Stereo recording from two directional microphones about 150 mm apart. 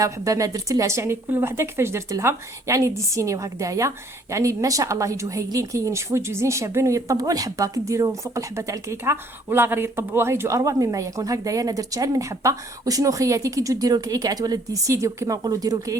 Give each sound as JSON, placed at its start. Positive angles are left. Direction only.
{"t": 0.0, "sound": "speech", "side_deg": -20}